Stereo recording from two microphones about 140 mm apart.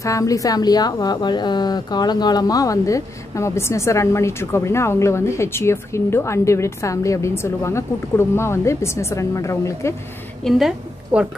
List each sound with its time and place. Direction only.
0.0 s a woman's voice: 25° left (ahead or behind)
10.4 s a woman's voice: 5° left (ahead or behind)
11.1 s a woman's voice: 10° right (ahead or behind)